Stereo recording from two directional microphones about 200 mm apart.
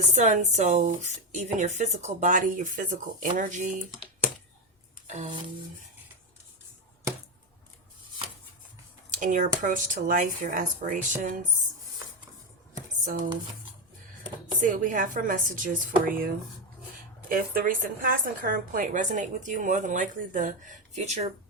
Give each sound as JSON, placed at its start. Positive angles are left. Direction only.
{"t": 0.1, "sound": "a woman's voice", "side_deg": -40}
{"t": 5.0, "sound": "music", "side_deg": -35}
{"t": 9.0, "sound": "a woman's voice", "side_deg": -40}
{"t": 13.1, "sound": "a woman's voice", "side_deg": -40}
{"t": 14.6, "sound": "a woman's voice", "side_deg": -40}